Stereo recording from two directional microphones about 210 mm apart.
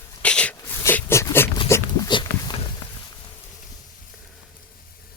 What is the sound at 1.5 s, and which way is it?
Dog, 15° left (ahead or behind).